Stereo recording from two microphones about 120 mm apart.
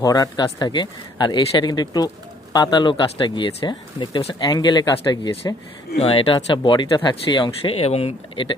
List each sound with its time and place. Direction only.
0.0 s speech: 30° left (ahead or behind)
6.0 s speech: 50° left (ahead or behind)
6.3 s speech: 40° left (ahead or behind)